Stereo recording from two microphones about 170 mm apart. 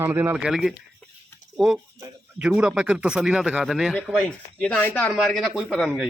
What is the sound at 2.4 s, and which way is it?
Speech, 5° right (ahead or behind).